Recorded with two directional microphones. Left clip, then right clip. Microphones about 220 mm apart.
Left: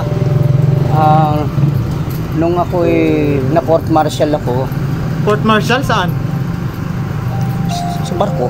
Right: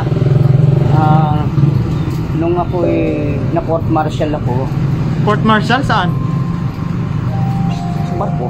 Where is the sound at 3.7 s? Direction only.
45° left (ahead or behind).